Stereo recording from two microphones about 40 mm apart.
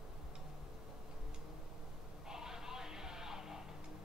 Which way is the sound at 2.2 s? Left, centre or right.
Centre.